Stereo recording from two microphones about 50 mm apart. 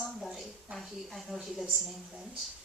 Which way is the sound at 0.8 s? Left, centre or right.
Centre.